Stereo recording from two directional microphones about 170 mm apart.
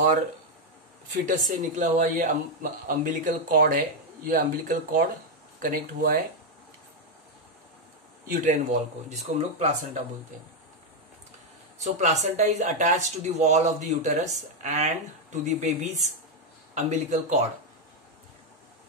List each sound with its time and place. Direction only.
1.2 s speech: 50° right (ahead or behind)
8.3 s speech: 50° right (ahead or behind)
11.8 s speech: 45° right (ahead or behind)